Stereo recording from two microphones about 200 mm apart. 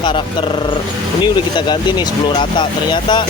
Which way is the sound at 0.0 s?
25° left (ahead or behind).